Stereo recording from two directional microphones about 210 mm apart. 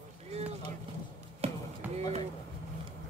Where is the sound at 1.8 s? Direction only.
10° right (ahead or behind).